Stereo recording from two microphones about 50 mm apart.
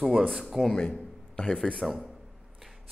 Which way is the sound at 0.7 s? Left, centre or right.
Centre.